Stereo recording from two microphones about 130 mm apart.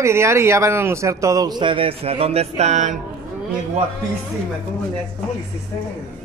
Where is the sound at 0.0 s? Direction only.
20° right (ahead or behind); by 3.0 s 65° right (ahead or behind).